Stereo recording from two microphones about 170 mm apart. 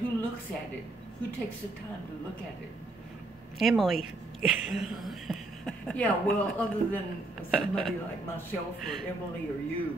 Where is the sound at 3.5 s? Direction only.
Centre (ahead or behind).